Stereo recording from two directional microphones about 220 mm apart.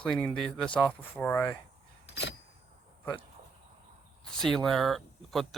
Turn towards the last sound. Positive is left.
turn(degrees=0)  # may be behind; listen again after turning